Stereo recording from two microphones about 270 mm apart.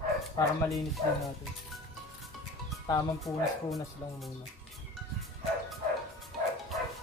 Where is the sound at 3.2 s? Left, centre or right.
Centre.